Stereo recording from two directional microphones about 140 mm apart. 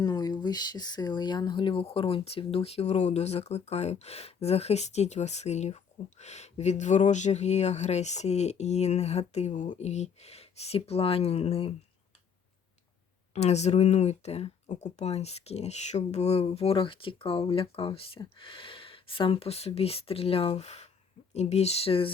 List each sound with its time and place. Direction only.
0.0 s speech: 30° left (ahead or behind); by 11.7 s 45° left (ahead or behind)
13.3 s speech: 50° left (ahead or behind)